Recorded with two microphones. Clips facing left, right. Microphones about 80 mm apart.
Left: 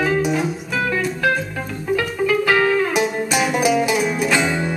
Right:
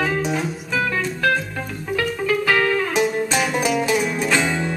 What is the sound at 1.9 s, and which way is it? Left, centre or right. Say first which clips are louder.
Music: left 2 dB; centre.